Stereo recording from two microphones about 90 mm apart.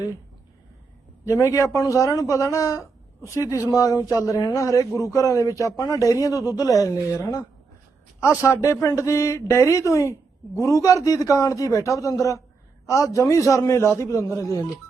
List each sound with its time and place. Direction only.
1.2 s a man's voice: 35° left (ahead or behind)